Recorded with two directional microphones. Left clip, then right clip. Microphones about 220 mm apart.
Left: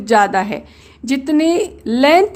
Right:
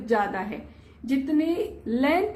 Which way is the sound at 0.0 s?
50° left (ahead or behind).